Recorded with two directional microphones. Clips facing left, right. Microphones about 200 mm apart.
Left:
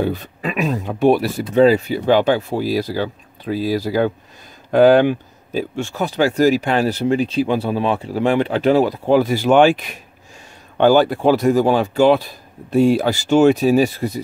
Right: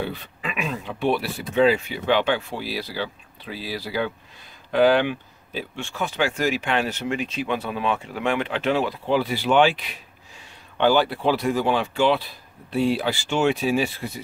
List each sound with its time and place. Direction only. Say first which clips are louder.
0.0 s speech: left 8 dB; 45° left (ahead or behind)